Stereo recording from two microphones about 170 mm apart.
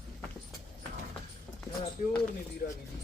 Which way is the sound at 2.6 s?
65° left (ahead or behind).